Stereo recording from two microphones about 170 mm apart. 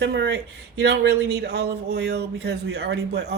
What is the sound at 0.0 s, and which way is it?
Speech, 90° right.